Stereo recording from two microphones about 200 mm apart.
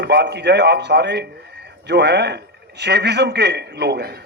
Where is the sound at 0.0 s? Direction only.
55° right (ahead or behind).